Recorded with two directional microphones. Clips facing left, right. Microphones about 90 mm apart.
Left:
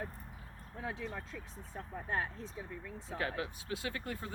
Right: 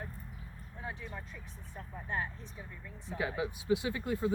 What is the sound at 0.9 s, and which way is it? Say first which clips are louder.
Speech: left 2 dB; 85° left.